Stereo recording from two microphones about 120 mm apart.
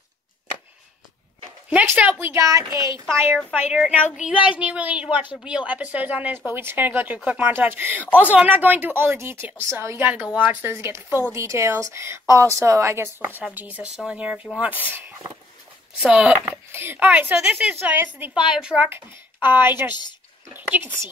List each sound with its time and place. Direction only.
1.7 s a woman's voice: 10° right (ahead or behind); by 3.0 s 25° right (ahead or behind)
3.3 s speech: 5° left (ahead or behind)
3.8 s a woman's voice: 10° right (ahead or behind)
13.4 s speech: 10° right (ahead or behind)
16.0 s speech: 5° right (ahead or behind)
16.7 s speech: 15° right (ahead or behind)